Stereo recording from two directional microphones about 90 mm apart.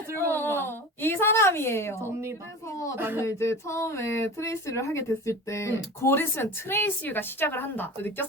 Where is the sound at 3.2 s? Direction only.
30° left (ahead or behind).